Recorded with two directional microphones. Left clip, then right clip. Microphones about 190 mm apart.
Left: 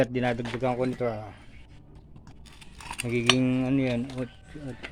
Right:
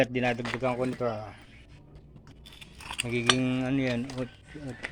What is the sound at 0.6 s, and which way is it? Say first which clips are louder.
Speech: left 3 dB; 15° left (ahead or behind).